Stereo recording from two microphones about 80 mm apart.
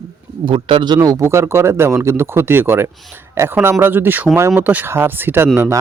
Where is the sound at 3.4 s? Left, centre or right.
Right.